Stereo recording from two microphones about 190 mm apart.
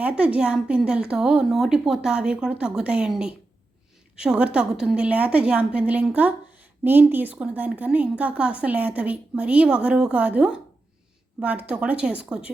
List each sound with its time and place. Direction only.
0.0 s a woman's voice: 5° right (ahead or behind)